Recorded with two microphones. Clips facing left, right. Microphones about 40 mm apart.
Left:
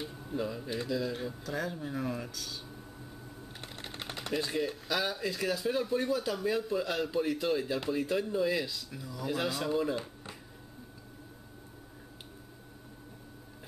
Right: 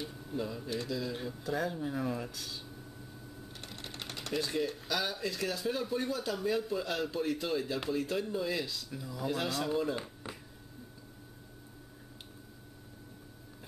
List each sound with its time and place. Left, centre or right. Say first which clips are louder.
0.0 s speech: left 2 dB; centre
2.3 s speech: left 1 dB; centre
3.6 s speech: left 2 dB; centre
9.0 s speech: right 2 dB; centre
9.3 s speech: left 2 dB; centre